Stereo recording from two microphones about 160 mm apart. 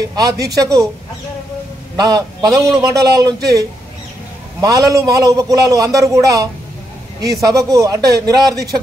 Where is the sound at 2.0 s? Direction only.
25° right (ahead or behind).